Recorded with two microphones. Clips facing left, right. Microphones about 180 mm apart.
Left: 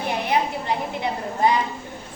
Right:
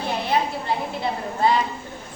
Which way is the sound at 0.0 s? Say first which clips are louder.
Even; 15° left (ahead or behind).